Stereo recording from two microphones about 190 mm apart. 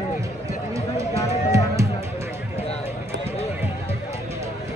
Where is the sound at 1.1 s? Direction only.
35° left (ahead or behind).